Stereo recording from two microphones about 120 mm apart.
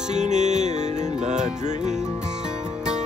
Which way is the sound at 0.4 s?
75° right (ahead or behind).